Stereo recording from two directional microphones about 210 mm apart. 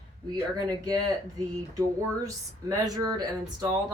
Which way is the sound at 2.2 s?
15° right (ahead or behind).